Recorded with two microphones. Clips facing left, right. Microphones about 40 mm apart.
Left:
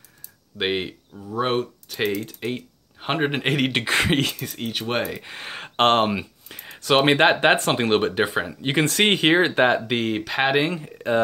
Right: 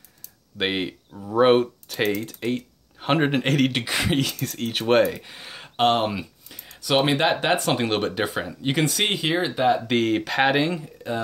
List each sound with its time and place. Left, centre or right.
0.6 s speech: centre
1.3 s speech: centre
2.0 s speech: centre
3.8 s speech: left
4.4 s speech: centre
4.7 s speech: centre
5.2 s speech: left
6.5 s a sound: left
6.9 s speech: left
7.7 s speech: left
8.8 s speech: left
9.8 s speech: centre
10.8 s speech: left